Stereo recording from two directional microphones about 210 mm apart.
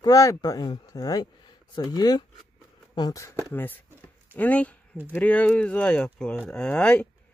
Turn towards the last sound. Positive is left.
turn(degrees=5)  # may be behind; listen again after turning